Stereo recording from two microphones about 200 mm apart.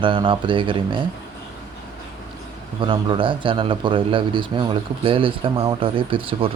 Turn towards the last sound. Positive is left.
turn(degrees=-25)  # may be behind; listen again after turning